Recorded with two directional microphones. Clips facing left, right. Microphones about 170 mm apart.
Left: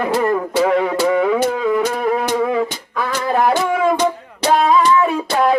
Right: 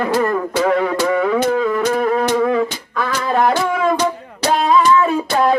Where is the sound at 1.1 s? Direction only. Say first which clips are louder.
Even; 10° left (ahead or behind).